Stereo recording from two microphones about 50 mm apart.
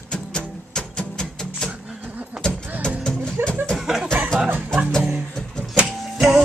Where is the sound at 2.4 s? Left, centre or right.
Centre.